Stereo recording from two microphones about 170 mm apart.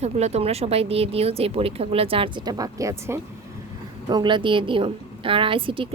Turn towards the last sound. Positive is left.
turn(degrees=-30)  # may be behind; listen again after turning